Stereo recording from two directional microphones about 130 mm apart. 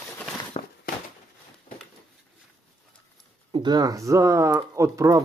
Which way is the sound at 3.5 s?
35° right (ahead or behind).